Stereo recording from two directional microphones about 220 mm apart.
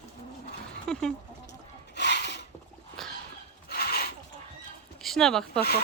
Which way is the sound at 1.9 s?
50° left (ahead or behind).